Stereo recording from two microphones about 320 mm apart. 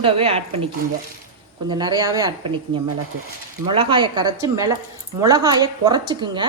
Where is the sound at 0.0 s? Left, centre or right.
Centre.